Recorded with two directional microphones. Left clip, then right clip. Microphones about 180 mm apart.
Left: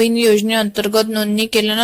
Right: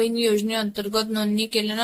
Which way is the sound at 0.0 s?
35° left (ahead or behind).